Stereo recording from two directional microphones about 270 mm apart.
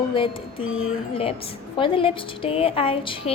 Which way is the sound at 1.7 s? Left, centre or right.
Centre.